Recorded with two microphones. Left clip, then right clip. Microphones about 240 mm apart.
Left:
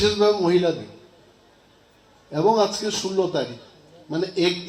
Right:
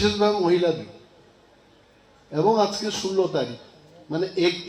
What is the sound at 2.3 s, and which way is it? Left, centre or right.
A man's voice, left.